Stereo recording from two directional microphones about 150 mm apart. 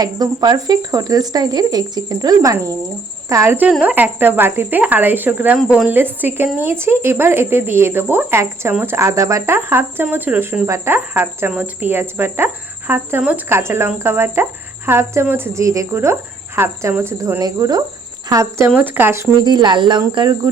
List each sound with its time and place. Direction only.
0.0 s speech: 25° right (ahead or behind)
19.4 s speech: 30° right (ahead or behind)